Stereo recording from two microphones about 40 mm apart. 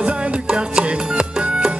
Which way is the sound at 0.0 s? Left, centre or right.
Right.